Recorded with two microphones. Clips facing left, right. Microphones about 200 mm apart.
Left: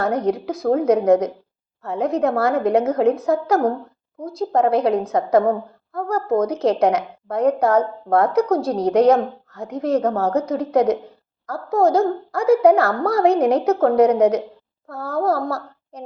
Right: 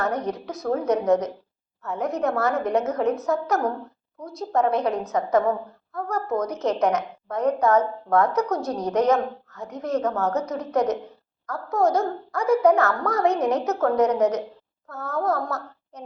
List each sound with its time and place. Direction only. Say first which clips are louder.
0.4 s a woman's voice: left 5 dB; 30° left (ahead or behind)